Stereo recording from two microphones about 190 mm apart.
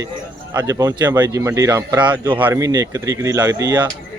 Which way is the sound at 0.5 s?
20° right (ahead or behind).